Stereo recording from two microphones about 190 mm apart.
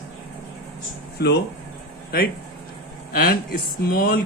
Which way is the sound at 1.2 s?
60° left (ahead or behind).